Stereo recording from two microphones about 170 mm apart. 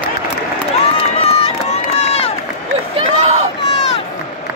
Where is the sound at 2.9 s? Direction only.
40° right (ahead or behind).